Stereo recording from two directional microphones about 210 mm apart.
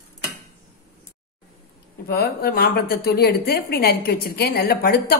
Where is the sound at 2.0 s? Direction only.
50° left (ahead or behind).